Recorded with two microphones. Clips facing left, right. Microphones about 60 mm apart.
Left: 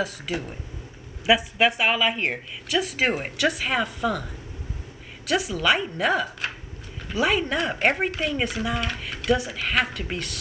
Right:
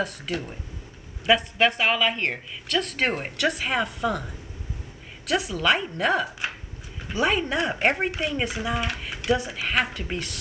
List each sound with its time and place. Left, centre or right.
0.0 s speech: centre